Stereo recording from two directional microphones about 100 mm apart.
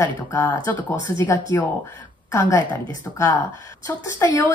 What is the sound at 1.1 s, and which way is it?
Speech, 25° left (ahead or behind).